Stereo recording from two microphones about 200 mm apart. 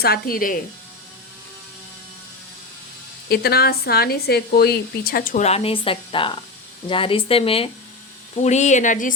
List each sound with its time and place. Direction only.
0.0 s speech: 50° left (ahead or behind)
3.2 s speech: 50° left (ahead or behind)